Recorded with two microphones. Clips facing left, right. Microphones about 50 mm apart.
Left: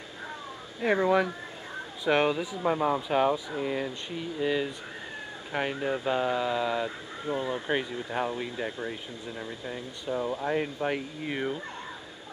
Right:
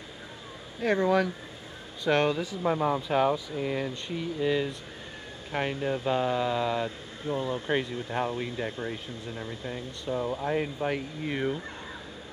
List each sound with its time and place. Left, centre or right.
0.7 s speech: centre
7.2 s speech: centre
7.7 s speech: centre